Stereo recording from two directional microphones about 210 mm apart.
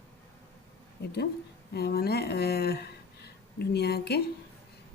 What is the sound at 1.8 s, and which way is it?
Speech, 50° left (ahead or behind).